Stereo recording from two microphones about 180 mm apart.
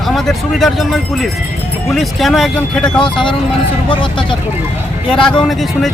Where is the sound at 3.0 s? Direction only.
25° left (ahead or behind).